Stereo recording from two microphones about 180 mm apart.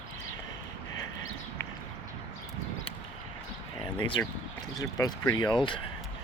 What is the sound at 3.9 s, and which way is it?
Speech, 25° left (ahead or behind).